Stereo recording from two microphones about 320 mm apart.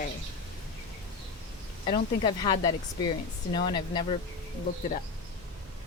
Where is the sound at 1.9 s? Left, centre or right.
Centre.